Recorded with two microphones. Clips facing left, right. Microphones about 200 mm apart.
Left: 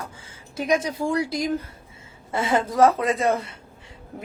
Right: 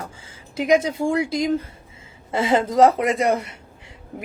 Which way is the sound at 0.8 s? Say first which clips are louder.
Right 3 dB; 25° right (ahead or behind).